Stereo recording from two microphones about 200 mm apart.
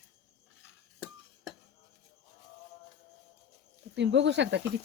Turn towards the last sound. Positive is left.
turn(degrees=-60)  # may be behind; listen again after turning